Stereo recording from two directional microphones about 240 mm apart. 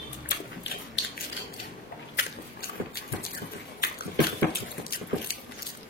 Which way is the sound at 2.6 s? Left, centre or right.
Left.